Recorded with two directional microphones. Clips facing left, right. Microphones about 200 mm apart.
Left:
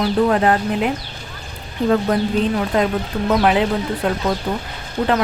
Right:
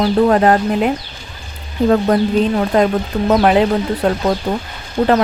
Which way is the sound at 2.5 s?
45° right (ahead or behind).